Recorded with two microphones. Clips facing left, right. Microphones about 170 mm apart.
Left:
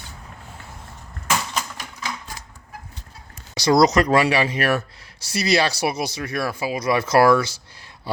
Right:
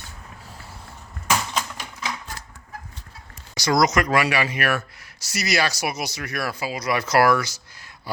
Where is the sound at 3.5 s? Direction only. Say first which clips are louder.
Left 4 dB; 30° left (ahead or behind).